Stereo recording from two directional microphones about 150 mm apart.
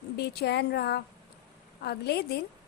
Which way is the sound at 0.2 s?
90° left.